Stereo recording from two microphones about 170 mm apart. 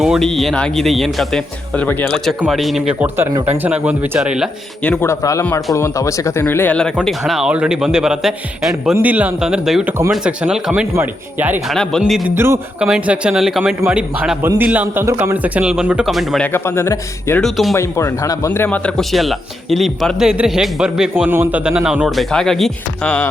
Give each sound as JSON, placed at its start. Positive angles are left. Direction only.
{"t": 0.0, "sound": "a man's voice", "side_deg": 0}
{"t": 4.8, "sound": "a man's voice", "side_deg": 10}
{"t": 11.7, "sound": "a man's voice", "side_deg": 5}
{"t": 12.3, "sound": "a man's voice", "side_deg": -15}
{"t": 16.5, "sound": "speech", "side_deg": 15}
{"t": 17.4, "sound": "a man's voice", "side_deg": 0}
{"t": 17.7, "sound": "a man's voice", "side_deg": 15}